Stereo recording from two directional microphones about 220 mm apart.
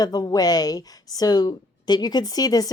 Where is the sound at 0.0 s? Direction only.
20° left (ahead or behind).